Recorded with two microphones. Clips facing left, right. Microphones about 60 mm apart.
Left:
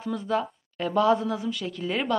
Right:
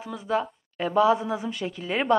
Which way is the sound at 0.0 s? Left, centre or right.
Centre.